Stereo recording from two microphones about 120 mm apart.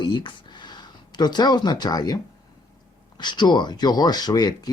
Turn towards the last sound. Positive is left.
turn(degrees=35)  # may be behind; listen again after turning